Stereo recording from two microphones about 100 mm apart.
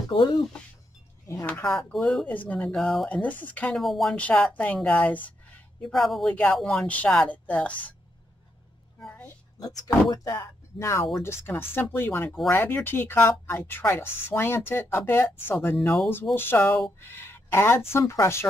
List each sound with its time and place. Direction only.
0.1 s speech: 50° left (ahead or behind)
1.4 s a woman's voice: 15° left (ahead or behind)
1.7 s speech: 5° left (ahead or behind)
2.2 s a woman's voice: 15° left (ahead or behind)
2.7 s speech: 5° left (ahead or behind)
3.2 s a woman's voice: 15° left (ahead or behind)
3.7 s speech: centre (ahead or behind)
4.2 s a woman's voice: 10° left (ahead or behind)
6.3 s a woman's voice: 10° left (ahead or behind)
10.0 s speech: 40° left (ahead or behind); by 18.5 s 25° left (ahead or behind)